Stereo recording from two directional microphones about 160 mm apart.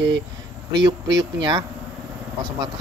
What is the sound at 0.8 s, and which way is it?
Speech, 25° right (ahead or behind).